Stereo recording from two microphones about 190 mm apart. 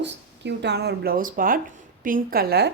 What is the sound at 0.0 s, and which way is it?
A woman's voice, 65° right (ahead or behind).